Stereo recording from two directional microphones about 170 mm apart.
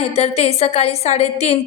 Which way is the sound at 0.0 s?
40° left (ahead or behind).